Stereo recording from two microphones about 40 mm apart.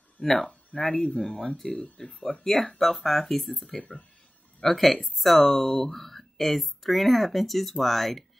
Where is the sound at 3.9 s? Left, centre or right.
Left.